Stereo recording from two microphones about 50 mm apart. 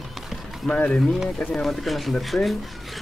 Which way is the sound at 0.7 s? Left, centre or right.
Left.